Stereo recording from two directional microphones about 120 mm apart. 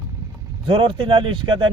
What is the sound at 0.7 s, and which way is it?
A man's voice, 45° right (ahead or behind).